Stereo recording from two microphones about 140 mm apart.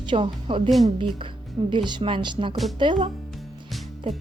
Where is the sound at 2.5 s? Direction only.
Centre (ahead or behind).